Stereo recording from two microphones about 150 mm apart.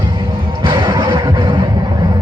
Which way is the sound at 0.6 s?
30° right (ahead or behind).